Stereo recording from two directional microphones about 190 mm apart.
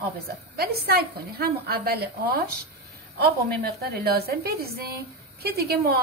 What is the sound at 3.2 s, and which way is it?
A woman's voice, 55° right (ahead or behind).